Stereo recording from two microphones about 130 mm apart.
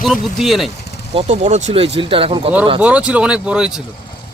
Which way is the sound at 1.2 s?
60° right (ahead or behind).